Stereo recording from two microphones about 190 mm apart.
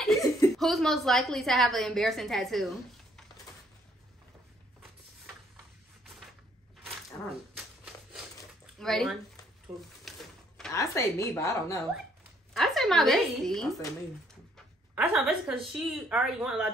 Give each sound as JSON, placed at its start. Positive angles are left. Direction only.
{"t": 0.0, "sound": "chuckle", "side_deg": 0}
{"t": 0.6, "sound": "a woman's voice", "side_deg": 0}
{"t": 7.5, "sound": "a sound", "side_deg": -5}
{"t": 8.7, "sound": "speech", "side_deg": 0}
{"t": 10.1, "sound": "cash register", "side_deg": 0}
{"t": 10.7, "sound": "a woman's voice", "side_deg": 15}
{"t": 12.5, "sound": "a woman's voice", "side_deg": 0}
{"t": 15.0, "sound": "a woman's voice", "side_deg": -5}